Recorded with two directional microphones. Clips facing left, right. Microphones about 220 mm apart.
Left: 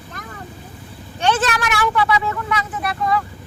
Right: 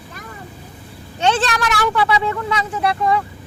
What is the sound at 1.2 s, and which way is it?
Speech, 30° right (ahead or behind).